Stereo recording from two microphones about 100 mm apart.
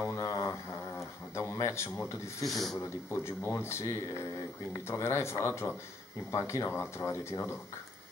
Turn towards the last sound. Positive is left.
turn(degrees=25)  # may be behind; listen again after turning